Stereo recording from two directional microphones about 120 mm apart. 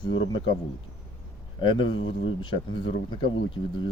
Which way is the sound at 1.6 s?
40° left (ahead or behind).